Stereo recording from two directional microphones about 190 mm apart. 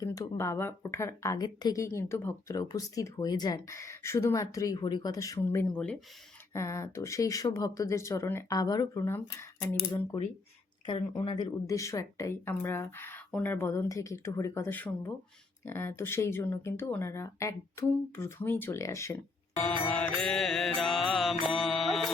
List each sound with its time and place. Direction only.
0.0 s speech: 20° left (ahead or behind)
11.3 s speech: 20° left (ahead or behind); by 21.3 s centre (ahead or behind)
21.4 s music: centre (ahead or behind)